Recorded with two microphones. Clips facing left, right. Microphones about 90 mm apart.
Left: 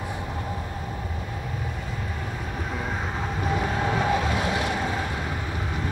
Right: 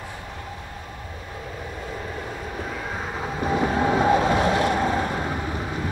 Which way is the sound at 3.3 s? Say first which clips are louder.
Right 5 dB; 25° right (ahead or behind).